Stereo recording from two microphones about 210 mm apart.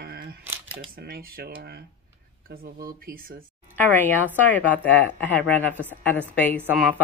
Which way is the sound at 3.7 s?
10° left (ahead or behind).